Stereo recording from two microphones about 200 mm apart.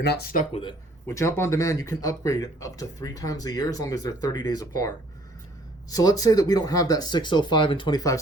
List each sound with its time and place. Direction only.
0.0 s speech: 55° left (ahead or behind)
0.5 s speech: 25° left (ahead or behind)
1.0 s speech: 15° left (ahead or behind)
5.9 s speech: 20° left (ahead or behind)